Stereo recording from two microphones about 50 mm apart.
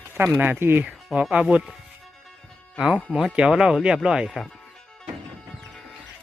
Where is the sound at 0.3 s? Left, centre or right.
Right.